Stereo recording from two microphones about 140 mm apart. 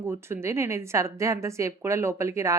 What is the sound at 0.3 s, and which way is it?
A woman's voice, 20° right (ahead or behind).